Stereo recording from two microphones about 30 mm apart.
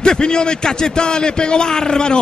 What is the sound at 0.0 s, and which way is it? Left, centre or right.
A man's voice, left.